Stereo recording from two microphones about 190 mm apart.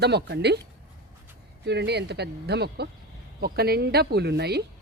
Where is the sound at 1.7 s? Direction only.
60° right (ahead or behind).